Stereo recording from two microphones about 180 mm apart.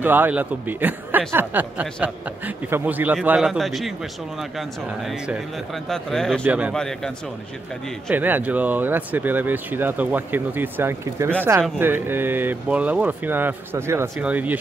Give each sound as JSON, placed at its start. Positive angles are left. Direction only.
{"t": 0.0, "sound": "speech", "side_deg": -10}
{"t": 6.4, "sound": "speech", "side_deg": -10}
{"t": 6.7, "sound": "speech", "side_deg": 5}
{"t": 8.1, "sound": "speech", "side_deg": -10}